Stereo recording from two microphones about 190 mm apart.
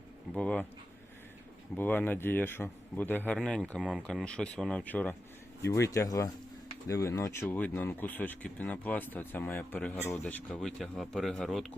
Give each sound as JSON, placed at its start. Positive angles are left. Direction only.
{"t": 0.3, "sound": "speech", "side_deg": 5}
{"t": 1.7, "sound": "speech", "side_deg": 10}